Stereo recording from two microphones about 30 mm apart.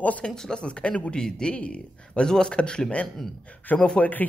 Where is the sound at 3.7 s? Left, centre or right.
Left.